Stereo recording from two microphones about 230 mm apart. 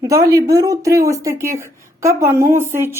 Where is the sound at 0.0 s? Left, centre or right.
Centre.